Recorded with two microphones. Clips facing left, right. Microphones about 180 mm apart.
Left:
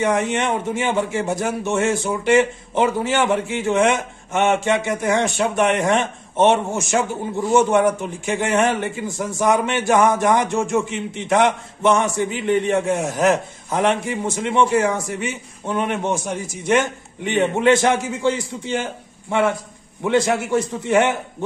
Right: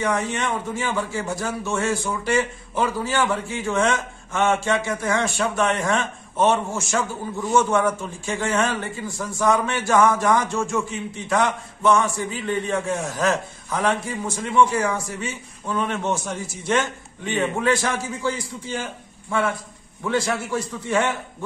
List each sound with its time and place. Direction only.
0.0 s a man's voice: 20° left (ahead or behind)
20.0 s a man's voice: 20° left (ahead or behind)